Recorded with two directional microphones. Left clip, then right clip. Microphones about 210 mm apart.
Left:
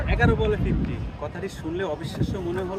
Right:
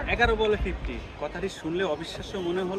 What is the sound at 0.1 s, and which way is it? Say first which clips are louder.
Speech: even; 10° right (ahead or behind).